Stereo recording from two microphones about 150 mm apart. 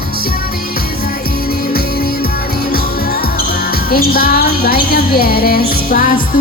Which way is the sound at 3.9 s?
80° left.